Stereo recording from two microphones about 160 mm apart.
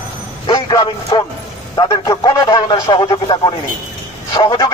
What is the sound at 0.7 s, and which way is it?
A man's voice, 30° left (ahead or behind).